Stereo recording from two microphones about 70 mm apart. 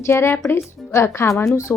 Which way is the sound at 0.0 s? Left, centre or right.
Left.